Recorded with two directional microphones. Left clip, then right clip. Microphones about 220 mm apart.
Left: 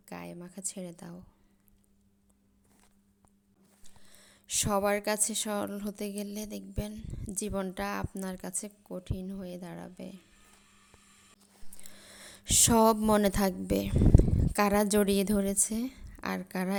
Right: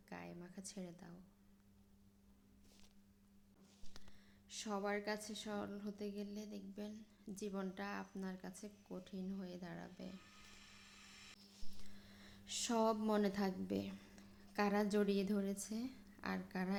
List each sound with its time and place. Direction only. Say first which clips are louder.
0.1 s a sound: left 10 dB; 40° left (ahead or behind)
3.8 s speech: left 7 dB; 50° left (ahead or behind); by 10.2 s 35° left (ahead or behind)
11.9 s speech: left 12 dB; 50° left (ahead or behind)